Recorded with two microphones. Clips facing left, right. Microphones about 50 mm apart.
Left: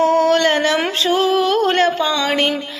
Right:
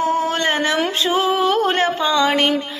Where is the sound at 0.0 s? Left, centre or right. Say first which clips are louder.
Left 5 dB; left.